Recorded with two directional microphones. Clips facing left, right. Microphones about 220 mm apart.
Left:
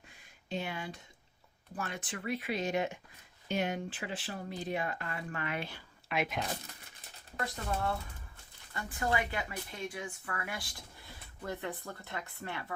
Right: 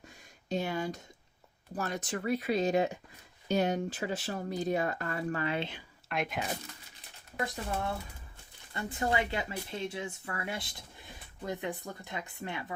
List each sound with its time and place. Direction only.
0.4 s speech: 40° right (ahead or behind); by 5.8 s 25° right (ahead or behind)
6.1 s speech: centre (ahead or behind)
8.7 s speech: 25° right (ahead or behind)